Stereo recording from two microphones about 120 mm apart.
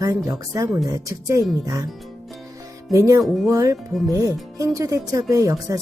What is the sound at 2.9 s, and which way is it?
Speech, 25° right (ahead or behind).